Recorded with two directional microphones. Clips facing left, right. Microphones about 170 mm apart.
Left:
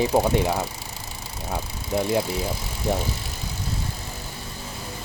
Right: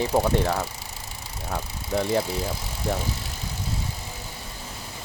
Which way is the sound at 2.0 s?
5° left (ahead or behind).